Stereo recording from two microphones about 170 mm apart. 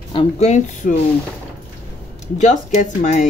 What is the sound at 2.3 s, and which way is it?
Speech, 45° left (ahead or behind).